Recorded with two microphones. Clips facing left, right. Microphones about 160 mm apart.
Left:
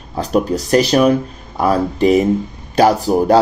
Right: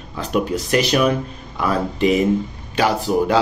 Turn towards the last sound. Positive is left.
turn(degrees=40)  # may be behind; listen again after turning